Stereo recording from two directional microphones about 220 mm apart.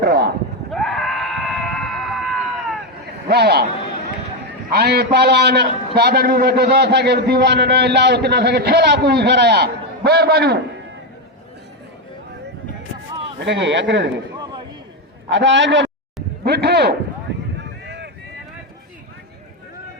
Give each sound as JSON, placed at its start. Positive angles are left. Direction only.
{"t": 0.0, "sound": "a sound", "side_deg": -50}
{"t": 0.7, "sound": "screaming", "side_deg": 0}
{"t": 3.2, "sound": "a man's voice", "side_deg": -45}
{"t": 4.7, "sound": "a man's voice", "side_deg": -45}
{"t": 13.4, "sound": "a man's voice", "side_deg": -55}
{"t": 14.3, "sound": "a sound", "side_deg": -20}
{"t": 15.3, "sound": "a man's voice", "side_deg": -55}
{"t": 17.6, "sound": "boat", "side_deg": -50}